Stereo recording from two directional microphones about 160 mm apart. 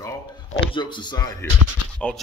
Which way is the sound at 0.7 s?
30° left (ahead or behind).